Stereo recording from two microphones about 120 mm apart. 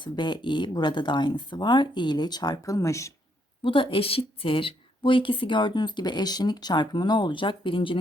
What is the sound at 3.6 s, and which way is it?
Speech, 45° left (ahead or behind).